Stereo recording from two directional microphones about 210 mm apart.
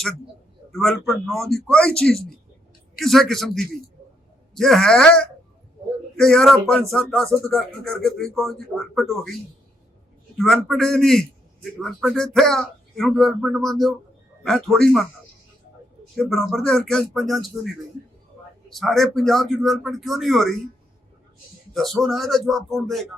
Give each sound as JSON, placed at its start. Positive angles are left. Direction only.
{"t": 0.7, "sound": "a man's voice", "side_deg": 0}
{"t": 10.3, "sound": "a man's voice", "side_deg": 5}
{"t": 16.1, "sound": "speech", "side_deg": 0}
{"t": 18.7, "sound": "speech", "side_deg": 0}
{"t": 21.7, "sound": "speech", "side_deg": 0}